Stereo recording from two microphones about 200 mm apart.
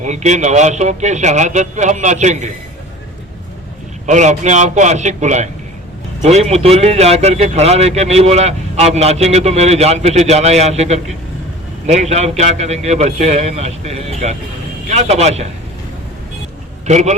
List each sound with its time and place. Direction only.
0.0 s a man's voice: 35° right (ahead or behind)
4.0 s a man's voice: 35° right (ahead or behind)
16.8 s a man's voice: 35° right (ahead or behind)